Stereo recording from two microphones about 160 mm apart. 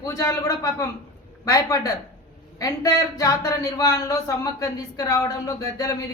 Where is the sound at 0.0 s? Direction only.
20° left (ahead or behind).